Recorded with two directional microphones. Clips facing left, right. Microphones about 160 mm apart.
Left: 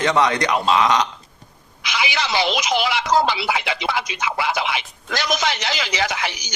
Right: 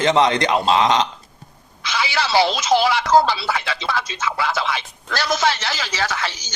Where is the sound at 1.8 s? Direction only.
15° left (ahead or behind).